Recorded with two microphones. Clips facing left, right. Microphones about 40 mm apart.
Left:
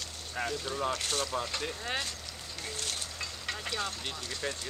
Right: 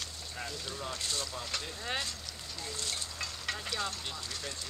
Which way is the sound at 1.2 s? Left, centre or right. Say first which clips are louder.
Left 7 dB; left.